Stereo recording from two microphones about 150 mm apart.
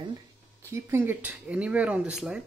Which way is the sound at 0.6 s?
20° right (ahead or behind).